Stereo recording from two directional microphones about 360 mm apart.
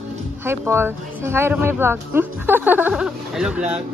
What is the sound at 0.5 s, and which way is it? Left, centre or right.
Speech, centre.